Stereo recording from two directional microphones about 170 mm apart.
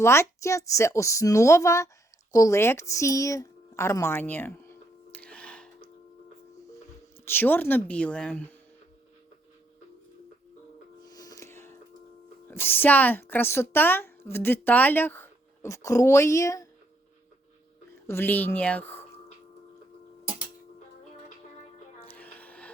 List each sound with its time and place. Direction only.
0.0 s a woman's voice: 15° left (ahead or behind)
2.3 s a sound: 20° left (ahead or behind)
7.3 s a woman's voice: 10° left (ahead or behind)
11.0 s a sound: 20° left (ahead or behind)
12.5 s a woman's voice: 10° left (ahead or behind)
18.1 s a woman's voice: 10° left (ahead or behind)
22.0 s music: 10° left (ahead or behind)